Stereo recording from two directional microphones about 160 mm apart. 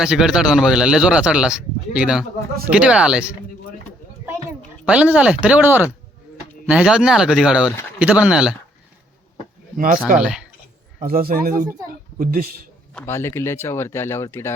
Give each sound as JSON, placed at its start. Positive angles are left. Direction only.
{"t": 0.0, "sound": "a man's voice", "side_deg": -5}
{"t": 4.9, "sound": "a man's voice", "side_deg": -5}
{"t": 9.7, "sound": "speech", "side_deg": -60}
{"t": 10.2, "sound": "speech", "side_deg": -5}
{"t": 11.0, "sound": "a man's voice", "side_deg": -65}
{"t": 13.1, "sound": "speech", "side_deg": 15}